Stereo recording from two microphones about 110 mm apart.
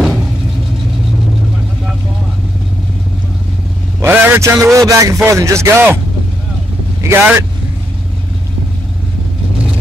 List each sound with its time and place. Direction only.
4.0 s a man's voice: 20° right (ahead or behind)
7.0 s a man's voice: 20° right (ahead or behind)